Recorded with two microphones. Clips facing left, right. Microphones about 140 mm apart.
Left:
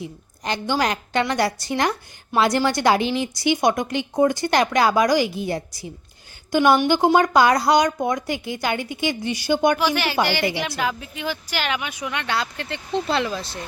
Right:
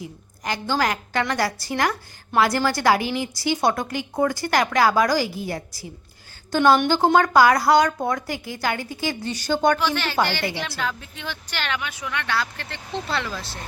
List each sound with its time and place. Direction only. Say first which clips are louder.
0.0 s a woman's voice: left 2 dB; 25° left (ahead or behind)